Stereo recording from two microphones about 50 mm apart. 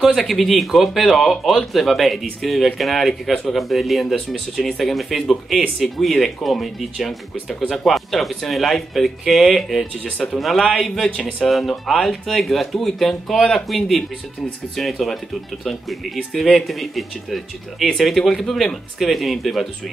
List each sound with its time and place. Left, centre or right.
0.0 s speech: centre
11.1 s speech: left
11.4 s speech: centre
16.2 s speech: centre